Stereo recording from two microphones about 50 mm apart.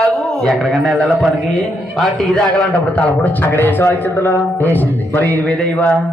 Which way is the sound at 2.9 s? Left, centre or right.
Left.